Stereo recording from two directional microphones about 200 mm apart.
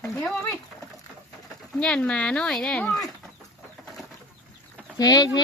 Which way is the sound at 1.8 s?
5° left (ahead or behind).